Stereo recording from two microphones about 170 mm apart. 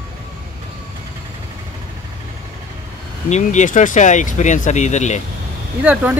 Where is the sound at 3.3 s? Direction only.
45° left (ahead or behind).